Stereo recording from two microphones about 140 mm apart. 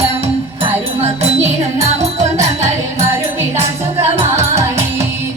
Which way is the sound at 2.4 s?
20° right (ahead or behind).